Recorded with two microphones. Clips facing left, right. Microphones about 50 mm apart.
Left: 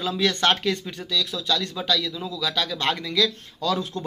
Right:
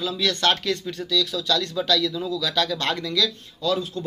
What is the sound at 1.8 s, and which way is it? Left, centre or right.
Speech, centre.